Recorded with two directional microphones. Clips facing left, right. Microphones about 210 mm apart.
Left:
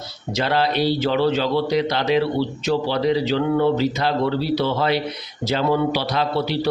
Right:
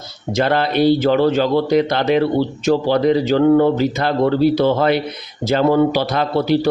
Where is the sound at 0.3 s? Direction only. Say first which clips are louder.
Right 4 dB; 50° right (ahead or behind).